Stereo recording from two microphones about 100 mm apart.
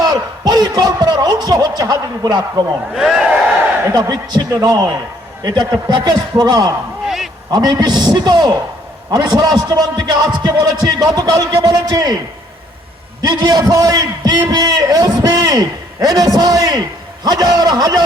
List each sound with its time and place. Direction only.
0.0 s speech: 40° right (ahead or behind)
2.9 s speech: 5° right (ahead or behind)
3.9 s a man's voice: 40° right (ahead or behind)
13.2 s a man's voice: 40° right (ahead or behind)